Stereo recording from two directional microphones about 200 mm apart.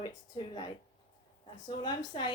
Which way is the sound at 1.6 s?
20° left (ahead or behind).